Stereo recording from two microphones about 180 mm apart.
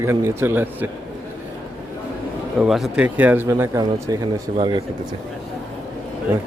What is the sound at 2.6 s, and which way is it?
A man's voice, centre (ahead or behind).